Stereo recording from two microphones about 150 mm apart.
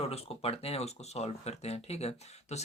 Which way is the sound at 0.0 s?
40° left (ahead or behind).